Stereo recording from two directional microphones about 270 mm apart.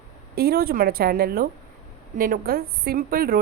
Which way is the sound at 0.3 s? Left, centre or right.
Right.